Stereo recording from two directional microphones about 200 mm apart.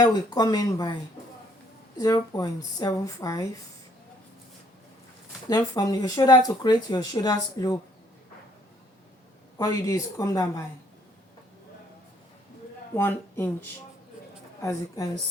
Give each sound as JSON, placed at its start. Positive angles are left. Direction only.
{"t": 0.0, "sound": "speech", "side_deg": 20}
{"t": 2.0, "sound": "speech", "side_deg": 20}
{"t": 5.5, "sound": "speech", "side_deg": 20}
{"t": 9.6, "sound": "speech", "side_deg": 15}
{"t": 12.9, "sound": "speech", "side_deg": 10}